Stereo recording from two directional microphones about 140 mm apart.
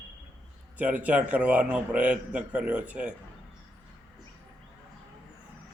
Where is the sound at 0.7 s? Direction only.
10° right (ahead or behind).